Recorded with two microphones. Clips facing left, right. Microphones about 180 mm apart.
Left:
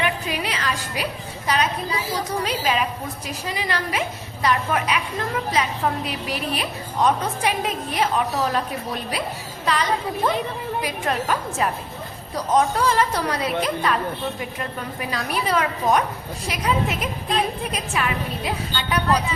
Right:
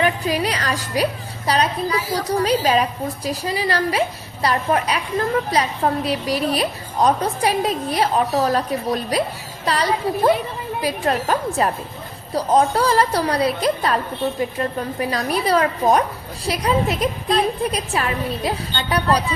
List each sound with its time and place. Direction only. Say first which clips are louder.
0.0 s a woman's voice: right 5 dB; 40° right (ahead or behind)
15.1 s a woman's voice: right 4 dB; 35° right (ahead or behind)